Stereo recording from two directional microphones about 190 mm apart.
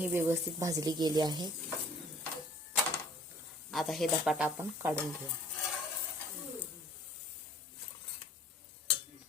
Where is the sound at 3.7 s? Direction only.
Centre (ahead or behind).